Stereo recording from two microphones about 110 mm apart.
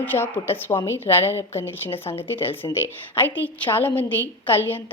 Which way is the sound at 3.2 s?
20° left (ahead or behind).